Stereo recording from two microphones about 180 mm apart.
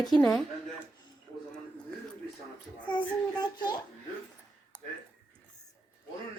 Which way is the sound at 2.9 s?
25° left (ahead or behind).